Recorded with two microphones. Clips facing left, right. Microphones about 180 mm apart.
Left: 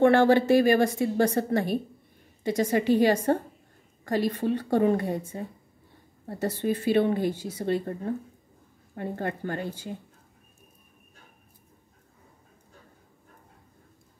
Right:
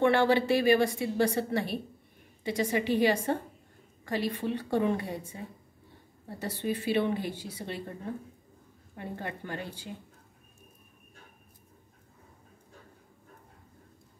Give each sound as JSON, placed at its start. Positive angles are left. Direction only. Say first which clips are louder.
{"t": 0.0, "sound": "a woman's voice", "louder": "left 5 dB", "side_deg": 45}
{"t": 8.9, "sound": "a woman's voice", "louder": "left 7 dB", "side_deg": 50}